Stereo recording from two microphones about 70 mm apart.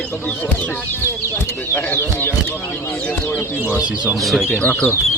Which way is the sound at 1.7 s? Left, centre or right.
Left.